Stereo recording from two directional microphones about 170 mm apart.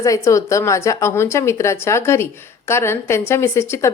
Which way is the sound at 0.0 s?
20° left (ahead or behind).